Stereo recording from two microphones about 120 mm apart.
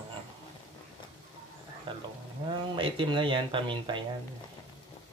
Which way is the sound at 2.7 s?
45° right (ahead or behind).